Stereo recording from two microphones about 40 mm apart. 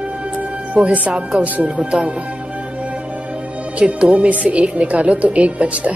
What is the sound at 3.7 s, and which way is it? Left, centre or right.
A woman's voice, right.